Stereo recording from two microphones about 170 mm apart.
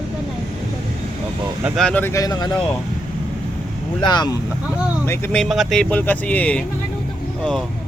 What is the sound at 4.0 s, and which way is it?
Speech, 25° left (ahead or behind).